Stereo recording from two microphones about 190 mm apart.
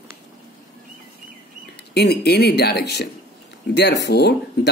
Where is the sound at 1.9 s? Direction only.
60° left (ahead or behind).